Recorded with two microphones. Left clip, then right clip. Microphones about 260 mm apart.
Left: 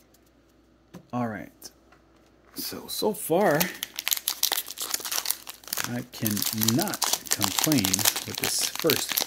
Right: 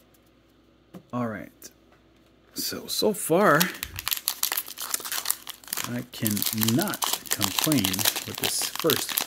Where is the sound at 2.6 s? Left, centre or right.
Centre.